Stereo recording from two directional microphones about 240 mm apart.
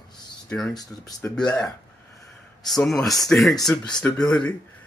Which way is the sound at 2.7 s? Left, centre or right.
Centre.